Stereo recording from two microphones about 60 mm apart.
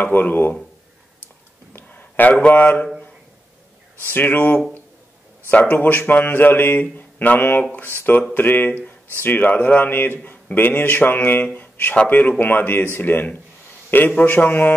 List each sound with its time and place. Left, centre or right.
0.0 s speech: left
1.7 s a sound: left
4.0 s a man's voice: left